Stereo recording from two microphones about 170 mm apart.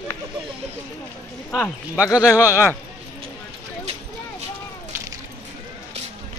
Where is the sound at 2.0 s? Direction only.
20° left (ahead or behind).